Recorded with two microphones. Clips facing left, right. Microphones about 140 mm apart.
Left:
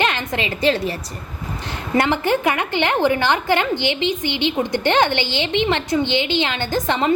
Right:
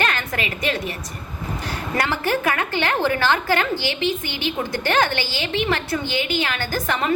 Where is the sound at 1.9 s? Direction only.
20° left (ahead or behind).